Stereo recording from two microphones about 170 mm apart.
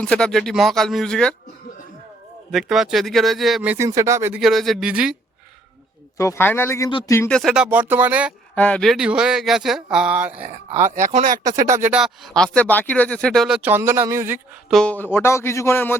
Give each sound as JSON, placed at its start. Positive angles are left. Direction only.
{"t": 0.0, "sound": "speech", "side_deg": 5}
{"t": 2.5, "sound": "speech", "side_deg": 0}
{"t": 4.4, "sound": "speech", "side_deg": 0}
{"t": 6.1, "sound": "speech", "side_deg": 15}
{"t": 8.5, "sound": "speech", "side_deg": 10}
{"t": 10.8, "sound": "speech", "side_deg": -45}
{"t": 11.7, "sound": "speech", "side_deg": -10}
{"t": 14.7, "sound": "speech", "side_deg": 5}